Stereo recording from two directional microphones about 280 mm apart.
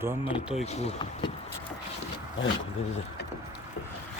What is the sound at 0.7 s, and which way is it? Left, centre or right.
Speech, left.